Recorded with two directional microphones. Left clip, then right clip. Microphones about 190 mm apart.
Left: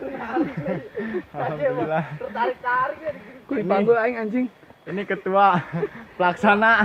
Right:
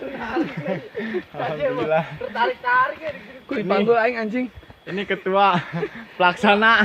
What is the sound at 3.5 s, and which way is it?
A man's voice, centre (ahead or behind).